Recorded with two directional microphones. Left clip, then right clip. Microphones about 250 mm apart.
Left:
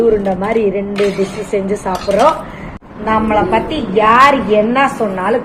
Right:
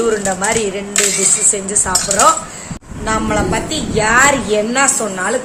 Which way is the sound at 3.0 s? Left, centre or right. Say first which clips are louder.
Left 4 dB; centre.